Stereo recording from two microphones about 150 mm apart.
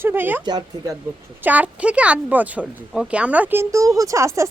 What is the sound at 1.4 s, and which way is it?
Speech, 10° right (ahead or behind).